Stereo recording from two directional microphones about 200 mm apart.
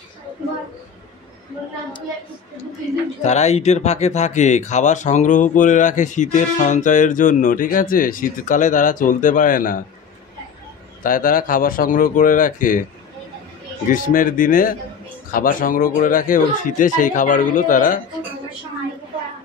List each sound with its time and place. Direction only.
3.3 s speech: 35° left (ahead or behind)
11.0 s speech: 45° left (ahead or behind)
13.8 s speech: 40° left (ahead or behind)